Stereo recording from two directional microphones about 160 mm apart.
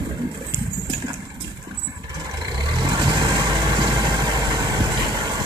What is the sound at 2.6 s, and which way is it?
Vehicle, 25° right (ahead or behind).